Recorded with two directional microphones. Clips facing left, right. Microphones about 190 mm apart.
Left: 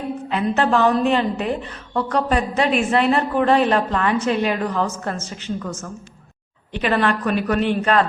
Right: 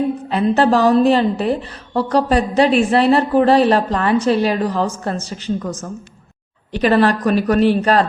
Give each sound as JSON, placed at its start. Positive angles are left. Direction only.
{"t": 0.3, "sound": "a woman's voice", "side_deg": -35}
{"t": 6.7, "sound": "a woman's voice", "side_deg": -40}